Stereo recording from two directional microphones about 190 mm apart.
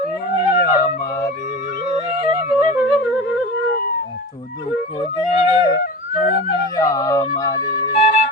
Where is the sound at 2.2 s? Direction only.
40° left (ahead or behind).